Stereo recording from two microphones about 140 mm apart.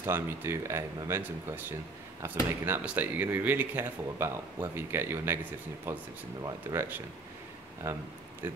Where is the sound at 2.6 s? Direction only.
15° right (ahead or behind).